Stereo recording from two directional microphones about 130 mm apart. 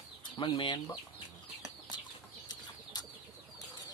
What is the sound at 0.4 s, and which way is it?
Speech, 40° left (ahead or behind).